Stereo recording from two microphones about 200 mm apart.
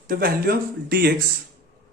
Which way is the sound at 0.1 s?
50° right (ahead or behind).